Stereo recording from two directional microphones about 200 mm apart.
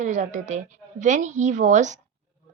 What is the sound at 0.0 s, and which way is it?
A woman's voice, 40° right (ahead or behind).